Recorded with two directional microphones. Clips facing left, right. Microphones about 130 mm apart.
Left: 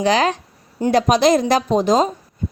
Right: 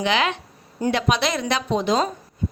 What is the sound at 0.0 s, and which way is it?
Speech, 40° left (ahead or behind).